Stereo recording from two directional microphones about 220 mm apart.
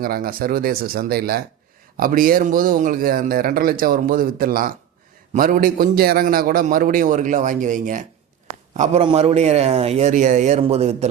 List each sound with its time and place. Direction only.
0.0 s a man's voice: 40° right (ahead or behind)